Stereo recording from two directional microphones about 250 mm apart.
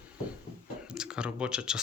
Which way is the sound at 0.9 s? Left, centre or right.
Centre.